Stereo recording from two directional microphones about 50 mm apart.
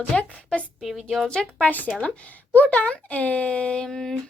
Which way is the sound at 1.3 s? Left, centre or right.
Centre.